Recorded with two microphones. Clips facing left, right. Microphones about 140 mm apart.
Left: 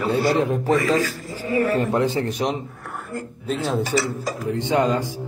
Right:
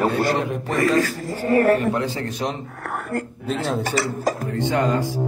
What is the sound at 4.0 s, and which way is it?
Speech, 50° right (ahead or behind).